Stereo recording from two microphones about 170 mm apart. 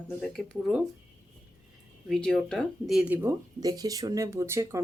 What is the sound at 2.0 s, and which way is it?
Speech, 5° left (ahead or behind).